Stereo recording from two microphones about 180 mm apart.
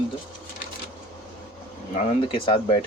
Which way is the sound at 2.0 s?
30° left (ahead or behind).